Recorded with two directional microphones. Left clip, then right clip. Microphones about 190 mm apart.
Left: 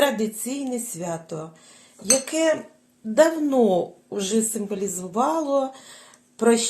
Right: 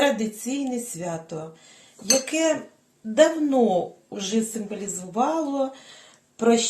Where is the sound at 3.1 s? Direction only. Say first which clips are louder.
Even; 45° left (ahead or behind).